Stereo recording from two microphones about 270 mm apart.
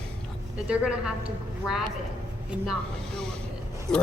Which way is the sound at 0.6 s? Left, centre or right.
Centre.